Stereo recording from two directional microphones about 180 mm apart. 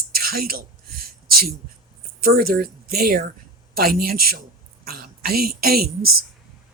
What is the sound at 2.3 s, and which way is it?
Speech, 55° right (ahead or behind).